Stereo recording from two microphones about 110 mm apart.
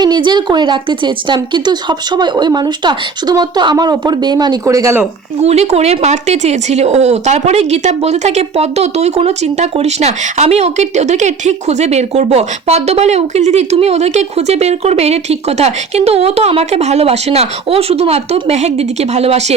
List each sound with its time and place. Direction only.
0.0 s a woman's voice: 40° right (ahead or behind)
5.4 s speech: 75° right (ahead or behind)